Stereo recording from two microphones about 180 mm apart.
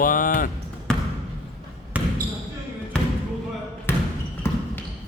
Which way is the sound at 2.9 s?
5° left (ahead or behind).